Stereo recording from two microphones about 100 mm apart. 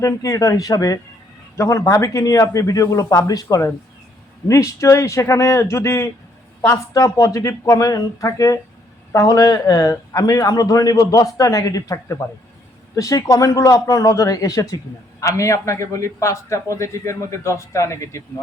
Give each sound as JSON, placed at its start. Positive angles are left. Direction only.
{"t": 0.0, "sound": "a man's voice", "side_deg": 35}